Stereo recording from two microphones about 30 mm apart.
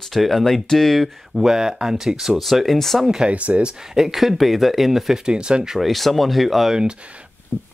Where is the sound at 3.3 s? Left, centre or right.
Right.